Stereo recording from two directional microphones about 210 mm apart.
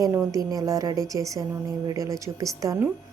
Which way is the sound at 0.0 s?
15° right (ahead or behind).